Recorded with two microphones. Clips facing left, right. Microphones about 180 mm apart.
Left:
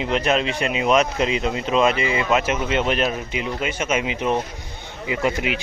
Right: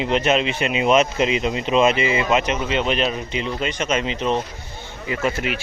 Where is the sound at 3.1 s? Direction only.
10° left (ahead or behind).